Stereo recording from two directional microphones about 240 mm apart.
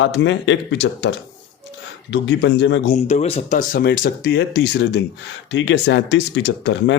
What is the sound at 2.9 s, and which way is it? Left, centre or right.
A man's voice, left.